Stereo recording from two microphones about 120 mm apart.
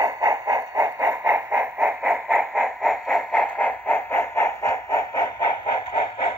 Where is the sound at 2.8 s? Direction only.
5° left (ahead or behind); by 5.8 s 35° left (ahead or behind).